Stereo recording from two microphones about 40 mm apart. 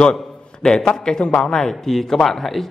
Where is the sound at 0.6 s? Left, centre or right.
Centre.